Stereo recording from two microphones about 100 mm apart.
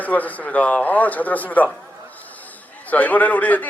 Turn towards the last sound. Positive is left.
turn(degrees=15)  # may be behind; listen again after turning